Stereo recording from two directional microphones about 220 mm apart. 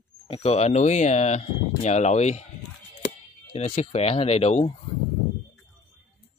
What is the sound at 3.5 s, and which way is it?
Speech, 30° left (ahead or behind).